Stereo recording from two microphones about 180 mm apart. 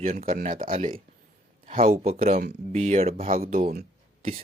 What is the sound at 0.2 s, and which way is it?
Speech, 50° right (ahead or behind).